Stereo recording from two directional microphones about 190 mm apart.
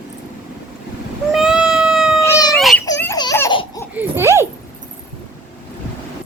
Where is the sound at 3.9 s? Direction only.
10° right (ahead or behind).